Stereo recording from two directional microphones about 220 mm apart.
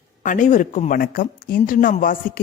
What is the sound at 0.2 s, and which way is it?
Speech, 35° left (ahead or behind).